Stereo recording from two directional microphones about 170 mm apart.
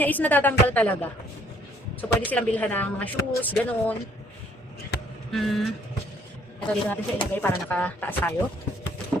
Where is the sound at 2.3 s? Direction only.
10° left (ahead or behind).